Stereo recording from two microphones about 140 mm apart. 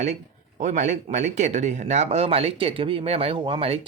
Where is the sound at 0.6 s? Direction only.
60° right (ahead or behind).